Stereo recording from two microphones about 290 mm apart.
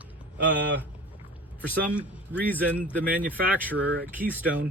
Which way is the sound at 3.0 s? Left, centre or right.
Right.